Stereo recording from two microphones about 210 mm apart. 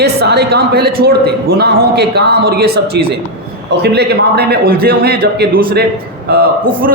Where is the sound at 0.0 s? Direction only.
50° right (ahead or behind).